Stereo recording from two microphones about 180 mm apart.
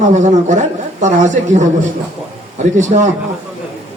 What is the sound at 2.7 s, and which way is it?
Speech, 40° right (ahead or behind).